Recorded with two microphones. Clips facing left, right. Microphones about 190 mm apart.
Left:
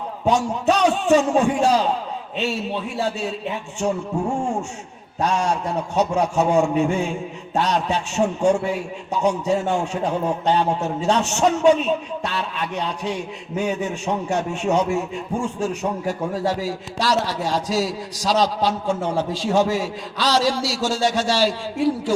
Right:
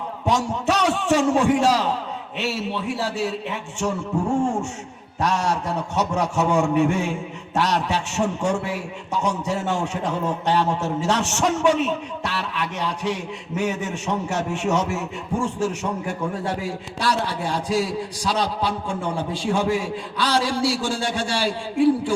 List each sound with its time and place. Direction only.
0.3 s a man's voice: 70° right (ahead or behind)
5.2 s a man's voice: 70° right (ahead or behind)